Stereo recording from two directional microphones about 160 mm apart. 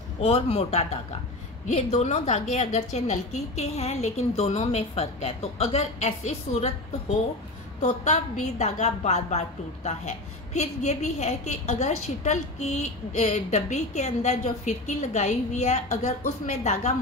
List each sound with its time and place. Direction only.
0.2 s a man's voice: 40° left (ahead or behind)
7.8 s a woman's voice: 45° left (ahead or behind)